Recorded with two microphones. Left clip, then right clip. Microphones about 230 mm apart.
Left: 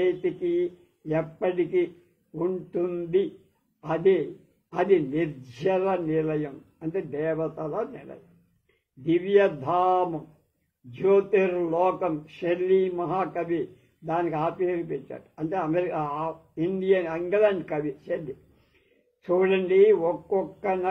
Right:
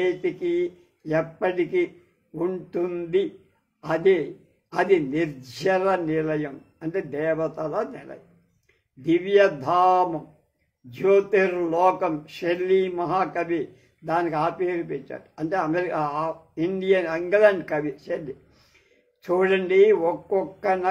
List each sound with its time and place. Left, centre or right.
0.0 s a man's voice: right
19.2 s a man's voice: right